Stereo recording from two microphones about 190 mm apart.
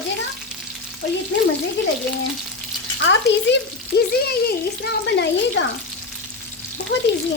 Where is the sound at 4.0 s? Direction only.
55° left (ahead or behind).